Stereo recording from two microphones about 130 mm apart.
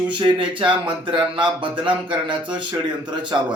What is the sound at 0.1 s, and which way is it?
Speech, 40° right (ahead or behind).